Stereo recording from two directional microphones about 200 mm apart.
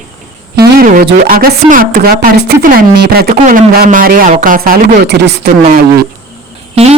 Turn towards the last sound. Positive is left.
turn(degrees=-30)  # may be behind; listen again after turning